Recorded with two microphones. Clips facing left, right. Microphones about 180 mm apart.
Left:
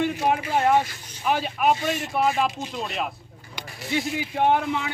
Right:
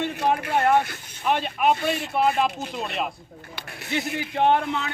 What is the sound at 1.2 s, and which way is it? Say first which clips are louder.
Speech: even; 5° left (ahead or behind).